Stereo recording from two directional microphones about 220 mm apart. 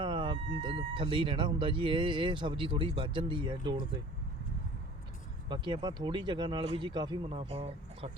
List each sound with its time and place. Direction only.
0.0 s speech: 20° right (ahead or behind)
5.5 s speech: 20° right (ahead or behind)